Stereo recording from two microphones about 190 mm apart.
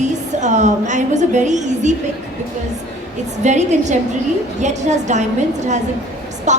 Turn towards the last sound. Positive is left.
turn(degrees=-40)  # may be behind; listen again after turning